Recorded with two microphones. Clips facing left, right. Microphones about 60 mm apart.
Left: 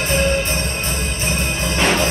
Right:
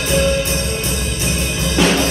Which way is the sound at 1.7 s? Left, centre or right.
Left.